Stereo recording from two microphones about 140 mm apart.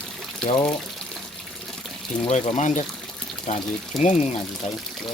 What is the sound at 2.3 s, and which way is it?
Speech, 55° left (ahead or behind).